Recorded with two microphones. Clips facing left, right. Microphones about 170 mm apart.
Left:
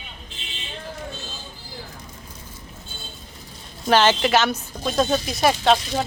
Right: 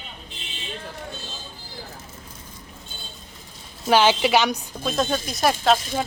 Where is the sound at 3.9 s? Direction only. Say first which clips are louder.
Even; 10° right (ahead or behind).